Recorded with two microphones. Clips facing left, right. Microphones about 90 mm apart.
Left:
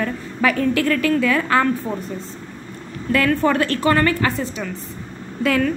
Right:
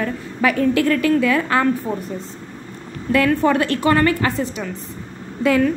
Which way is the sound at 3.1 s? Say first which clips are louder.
Right 1 dB; 20° right (ahead or behind).